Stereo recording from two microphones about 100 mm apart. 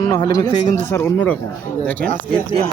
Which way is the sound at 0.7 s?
25° left (ahead or behind).